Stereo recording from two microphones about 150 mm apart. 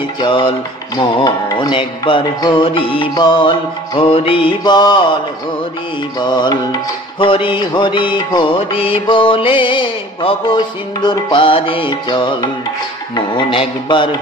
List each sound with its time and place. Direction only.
0.2 s music: 35° left (ahead or behind)
6.1 s music: 30° left (ahead or behind)